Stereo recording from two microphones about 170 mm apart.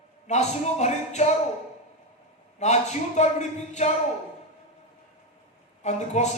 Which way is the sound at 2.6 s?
45° left (ahead or behind).